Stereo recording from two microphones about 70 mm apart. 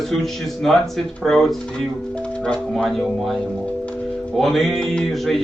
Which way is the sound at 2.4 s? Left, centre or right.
Centre.